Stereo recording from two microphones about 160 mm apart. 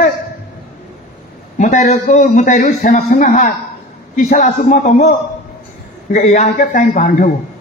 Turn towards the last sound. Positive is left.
turn(degrees=55)  # may be behind; listen again after turning